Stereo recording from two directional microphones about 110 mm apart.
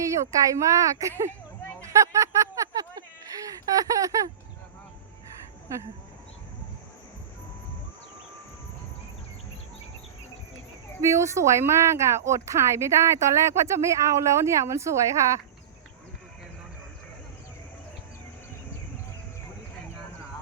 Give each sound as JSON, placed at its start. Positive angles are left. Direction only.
{"t": 0.0, "sound": "speech", "side_deg": -30}
{"t": 1.8, "sound": "a sound", "side_deg": -30}
{"t": 11.0, "sound": "speech", "side_deg": -25}